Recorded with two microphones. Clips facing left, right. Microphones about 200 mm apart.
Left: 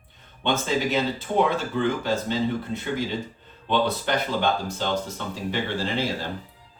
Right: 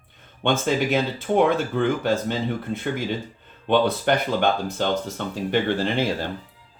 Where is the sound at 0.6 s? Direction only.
55° right (ahead or behind).